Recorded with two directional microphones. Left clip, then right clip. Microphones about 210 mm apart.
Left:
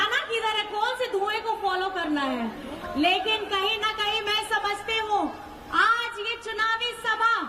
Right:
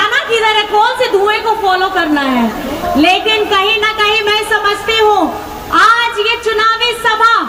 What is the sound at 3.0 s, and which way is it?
A woman's voice, 30° left (ahead or behind).